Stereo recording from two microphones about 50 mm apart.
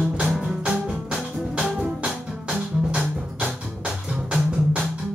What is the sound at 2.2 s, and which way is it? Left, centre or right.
Music, centre.